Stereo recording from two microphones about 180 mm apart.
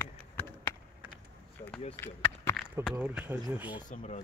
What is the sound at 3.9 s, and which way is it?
Speech, 40° left (ahead or behind).